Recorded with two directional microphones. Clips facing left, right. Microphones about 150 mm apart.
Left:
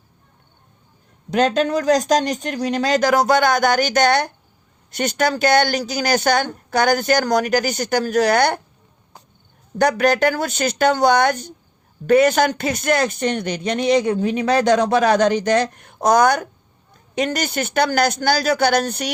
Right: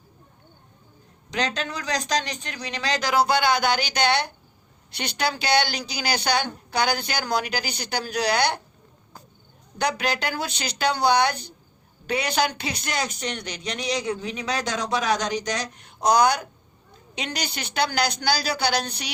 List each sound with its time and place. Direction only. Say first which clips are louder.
1.3 s speech: left 11 dB; 50° left (ahead or behind)
9.7 s speech: left 9 dB; 50° left (ahead or behind)